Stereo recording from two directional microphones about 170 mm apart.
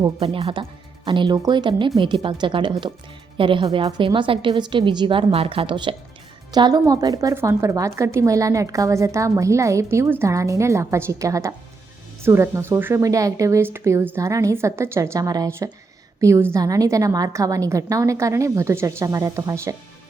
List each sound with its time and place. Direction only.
0.0 s a woman's voice: 35° right (ahead or behind); by 19.7 s 20° right (ahead or behind)